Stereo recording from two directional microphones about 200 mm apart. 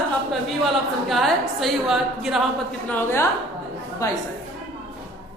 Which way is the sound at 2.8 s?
10° left (ahead or behind).